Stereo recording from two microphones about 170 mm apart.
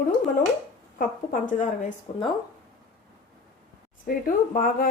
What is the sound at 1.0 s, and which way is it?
Speech, 50° left (ahead or behind).